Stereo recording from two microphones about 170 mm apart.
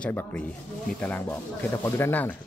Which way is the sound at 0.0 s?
10° left (ahead or behind).